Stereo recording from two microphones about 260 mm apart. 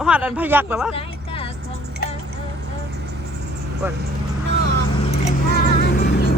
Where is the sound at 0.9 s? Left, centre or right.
Left.